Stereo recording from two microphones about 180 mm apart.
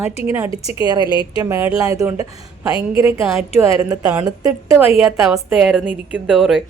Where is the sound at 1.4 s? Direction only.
15° right (ahead or behind).